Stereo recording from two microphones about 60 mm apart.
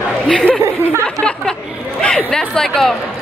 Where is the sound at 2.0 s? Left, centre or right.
Centre.